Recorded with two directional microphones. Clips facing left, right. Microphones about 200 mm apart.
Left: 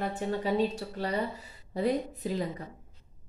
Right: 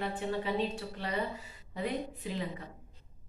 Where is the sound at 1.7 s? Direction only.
40° left (ahead or behind).